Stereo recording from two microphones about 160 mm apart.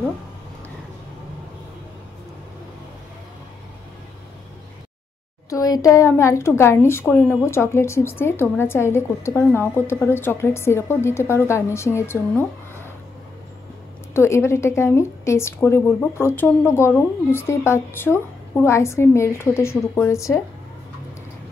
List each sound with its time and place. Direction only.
5.5 s a woman's voice: 20° left (ahead or behind)
14.1 s a woman's voice: 15° left (ahead or behind)